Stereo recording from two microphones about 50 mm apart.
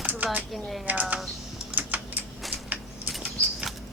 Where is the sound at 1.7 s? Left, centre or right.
Right.